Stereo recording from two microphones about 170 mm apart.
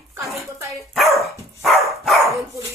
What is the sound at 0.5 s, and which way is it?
Speech, 20° right (ahead or behind).